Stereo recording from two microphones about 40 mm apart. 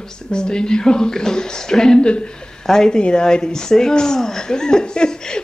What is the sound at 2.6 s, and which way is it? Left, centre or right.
A woman's voice, centre.